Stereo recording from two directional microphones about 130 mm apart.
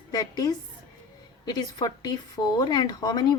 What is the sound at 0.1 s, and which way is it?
A woman's voice, 30° left (ahead or behind).